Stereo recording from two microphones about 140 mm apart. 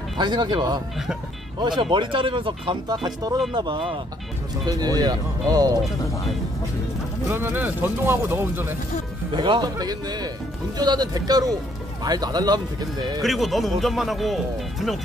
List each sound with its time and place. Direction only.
0.2 s speech: 35° right (ahead or behind)
7.2 s speech: 15° right (ahead or behind)
9.3 s speech: 35° right (ahead or behind)
13.2 s speech: centre (ahead or behind)